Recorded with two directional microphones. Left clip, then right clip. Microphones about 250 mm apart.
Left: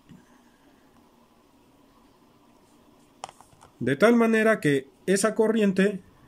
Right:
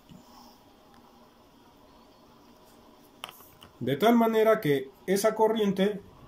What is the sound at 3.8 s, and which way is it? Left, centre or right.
Speech, left.